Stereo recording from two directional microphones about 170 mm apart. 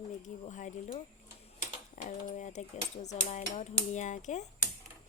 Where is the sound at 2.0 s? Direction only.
50° left (ahead or behind).